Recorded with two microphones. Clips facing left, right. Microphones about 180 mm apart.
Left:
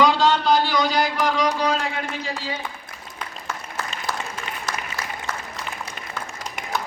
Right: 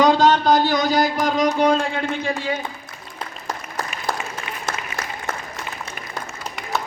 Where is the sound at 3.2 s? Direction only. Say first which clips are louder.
Right 2 dB; 35° right (ahead or behind).